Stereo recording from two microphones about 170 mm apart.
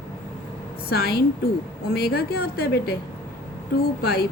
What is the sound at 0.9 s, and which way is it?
Speech, 65° left (ahead or behind).